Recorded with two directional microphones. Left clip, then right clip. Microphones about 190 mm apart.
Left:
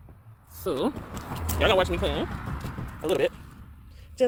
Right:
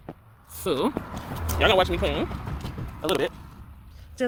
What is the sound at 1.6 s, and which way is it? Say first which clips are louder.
Speech: right 2 dB; centre (ahead or behind).